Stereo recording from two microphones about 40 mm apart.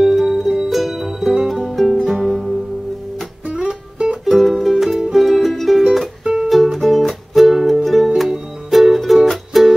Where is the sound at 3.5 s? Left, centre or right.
Right.